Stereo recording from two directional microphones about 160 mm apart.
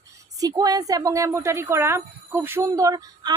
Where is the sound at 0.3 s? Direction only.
25° right (ahead or behind).